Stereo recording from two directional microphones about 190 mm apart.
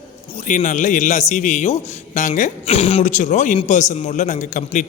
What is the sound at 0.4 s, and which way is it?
Speech, 40° left (ahead or behind).